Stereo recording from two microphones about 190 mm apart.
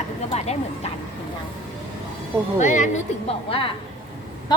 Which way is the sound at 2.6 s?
40° left (ahead or behind).